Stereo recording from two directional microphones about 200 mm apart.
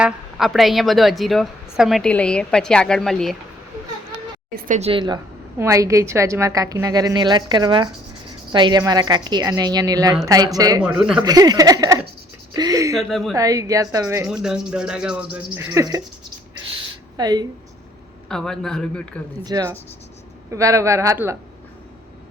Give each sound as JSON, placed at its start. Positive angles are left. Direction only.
{"t": 0.0, "sound": "a woman's voice", "side_deg": 0}
{"t": 4.5, "sound": "a woman's voice", "side_deg": -40}
{"t": 4.9, "sound": "a woman's voice", "side_deg": -25}
{"t": 10.8, "sound": "a woman's voice", "side_deg": -5}
{"t": 11.2, "sound": "a woman's voice", "side_deg": -20}
{"t": 13.0, "sound": "a woman's voice", "side_deg": 0}
{"t": 13.3, "sound": "a woman's voice", "side_deg": -15}
{"t": 14.4, "sound": "a woman's voice", "side_deg": -5}
{"t": 17.2, "sound": "a woman's voice", "side_deg": -20}
{"t": 18.3, "sound": "a woman's voice", "side_deg": 5}
{"t": 19.5, "sound": "a woman's voice", "side_deg": -20}